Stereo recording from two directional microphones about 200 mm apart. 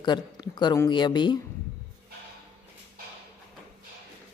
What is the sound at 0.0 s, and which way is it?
A woman's voice, 20° left (ahead or behind).